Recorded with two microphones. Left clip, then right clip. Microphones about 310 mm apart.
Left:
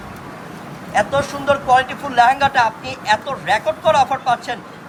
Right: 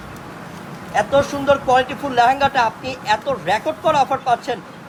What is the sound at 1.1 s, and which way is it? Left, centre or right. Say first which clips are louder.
A man's voice: right 2 dB; right.